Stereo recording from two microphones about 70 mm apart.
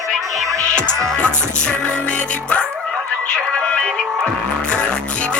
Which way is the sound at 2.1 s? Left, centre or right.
Centre.